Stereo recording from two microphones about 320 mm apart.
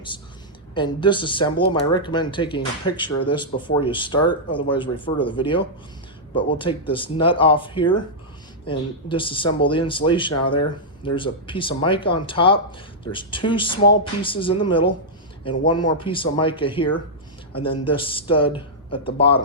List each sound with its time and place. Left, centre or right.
0.7 s speech: centre